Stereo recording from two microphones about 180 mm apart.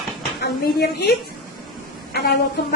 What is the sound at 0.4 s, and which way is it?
Speech, 60° left (ahead or behind).